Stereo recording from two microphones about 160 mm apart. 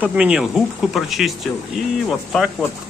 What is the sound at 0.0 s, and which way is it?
Speech, 5° right (ahead or behind).